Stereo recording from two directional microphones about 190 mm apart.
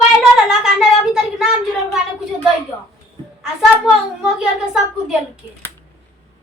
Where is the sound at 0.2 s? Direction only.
5° right (ahead or behind).